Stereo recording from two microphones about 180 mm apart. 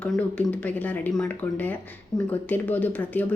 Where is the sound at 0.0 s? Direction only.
10° left (ahead or behind).